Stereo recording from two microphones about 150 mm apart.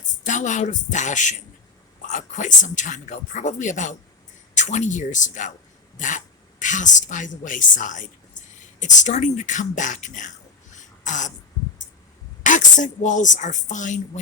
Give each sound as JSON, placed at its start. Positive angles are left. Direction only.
{"t": 0.3, "sound": "speech", "side_deg": 55}
{"t": 12.4, "sound": "speech", "side_deg": 60}